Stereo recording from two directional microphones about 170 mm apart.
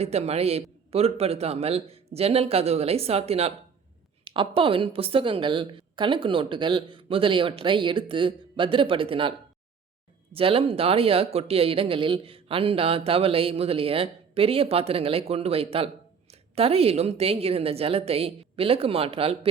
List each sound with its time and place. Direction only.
0.0 s a woman's voice: 40° right (ahead or behind)
10.3 s speech: 35° right (ahead or behind)